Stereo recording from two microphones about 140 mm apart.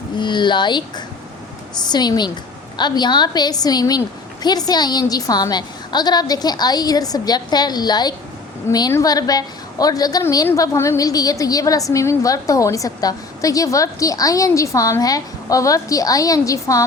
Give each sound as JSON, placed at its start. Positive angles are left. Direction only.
{"t": 0.2, "sound": "a woman's voice", "side_deg": 35}